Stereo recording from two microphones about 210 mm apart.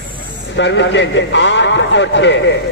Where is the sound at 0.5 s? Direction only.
60° left (ahead or behind).